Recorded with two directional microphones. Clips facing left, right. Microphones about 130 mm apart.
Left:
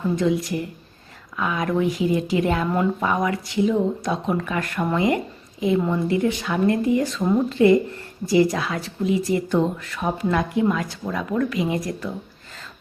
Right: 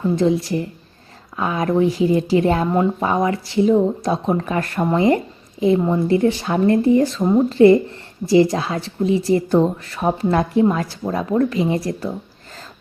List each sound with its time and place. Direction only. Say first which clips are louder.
0.2 s a woman's voice: right 4 dB; 30° right (ahead or behind)